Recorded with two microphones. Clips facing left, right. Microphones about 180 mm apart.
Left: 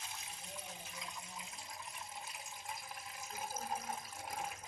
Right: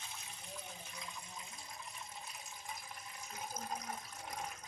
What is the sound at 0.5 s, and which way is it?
Water, 5° left (ahead or behind).